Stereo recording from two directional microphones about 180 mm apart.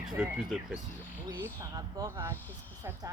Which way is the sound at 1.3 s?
15° right (ahead or behind).